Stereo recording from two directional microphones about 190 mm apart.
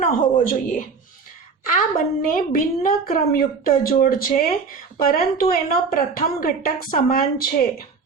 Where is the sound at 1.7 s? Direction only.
45° left (ahead or behind).